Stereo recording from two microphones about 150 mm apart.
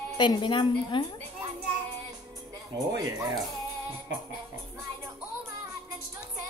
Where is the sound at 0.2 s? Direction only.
30° left (ahead or behind).